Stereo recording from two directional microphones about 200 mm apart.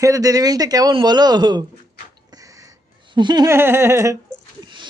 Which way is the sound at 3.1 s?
20° right (ahead or behind).